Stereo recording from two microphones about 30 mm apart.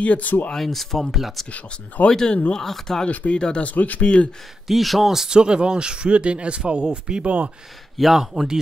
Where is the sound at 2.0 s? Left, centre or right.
Left.